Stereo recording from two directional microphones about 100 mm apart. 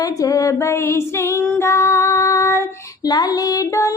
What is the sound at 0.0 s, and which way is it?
Female singing, 35° left (ahead or behind).